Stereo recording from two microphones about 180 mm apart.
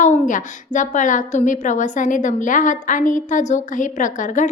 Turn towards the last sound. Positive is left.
turn(degrees=45)  # may be behind; listen again after turning